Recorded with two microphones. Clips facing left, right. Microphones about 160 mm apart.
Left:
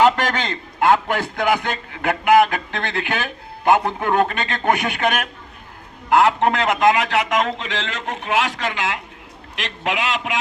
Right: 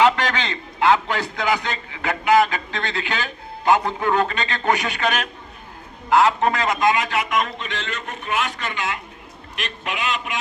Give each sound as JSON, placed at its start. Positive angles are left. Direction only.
{"t": 0.0, "sound": "a man's voice", "side_deg": 45}